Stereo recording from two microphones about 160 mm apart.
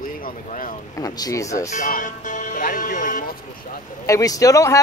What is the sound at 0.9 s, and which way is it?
Speech, 25° left (ahead or behind).